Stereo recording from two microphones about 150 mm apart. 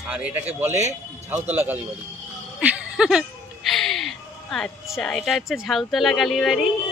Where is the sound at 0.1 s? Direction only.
10° right (ahead or behind).